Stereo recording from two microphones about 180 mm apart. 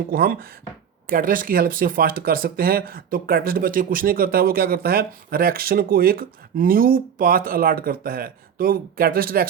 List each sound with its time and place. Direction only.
0.1 s speech: 55° right (ahead or behind)